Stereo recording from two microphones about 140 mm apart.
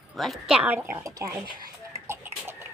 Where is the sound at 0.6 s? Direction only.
15° right (ahead or behind).